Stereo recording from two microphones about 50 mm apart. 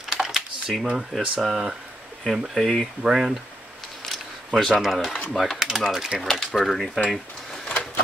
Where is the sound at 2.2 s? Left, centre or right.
Centre.